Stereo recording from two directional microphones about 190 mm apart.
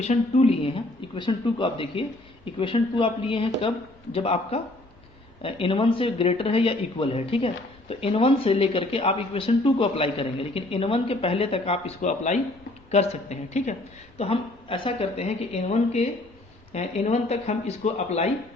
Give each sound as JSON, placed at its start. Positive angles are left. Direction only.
{"t": 0.0, "sound": "speech", "side_deg": 35}